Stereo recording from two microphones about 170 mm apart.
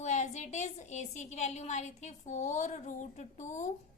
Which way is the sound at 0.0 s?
45° left (ahead or behind).